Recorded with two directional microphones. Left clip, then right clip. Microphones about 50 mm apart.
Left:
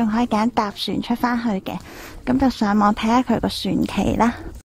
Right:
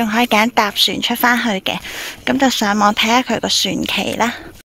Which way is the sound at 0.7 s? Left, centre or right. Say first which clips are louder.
Right 10 dB; left.